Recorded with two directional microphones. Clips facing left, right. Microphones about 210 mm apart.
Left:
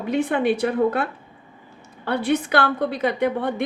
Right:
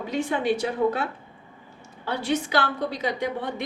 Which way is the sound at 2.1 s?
60° left (ahead or behind).